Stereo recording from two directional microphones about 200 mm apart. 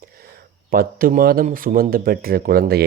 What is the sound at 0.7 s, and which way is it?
Speech, 45° right (ahead or behind).